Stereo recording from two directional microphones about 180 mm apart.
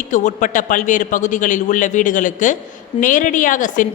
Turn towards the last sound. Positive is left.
turn(degrees=45)  # may be behind; listen again after turning